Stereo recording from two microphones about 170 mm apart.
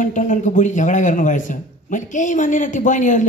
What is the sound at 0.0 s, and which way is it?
A man's voice, 50° left (ahead or behind).